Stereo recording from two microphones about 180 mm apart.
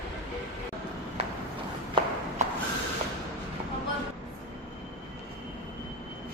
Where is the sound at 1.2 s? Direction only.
35° right (ahead or behind).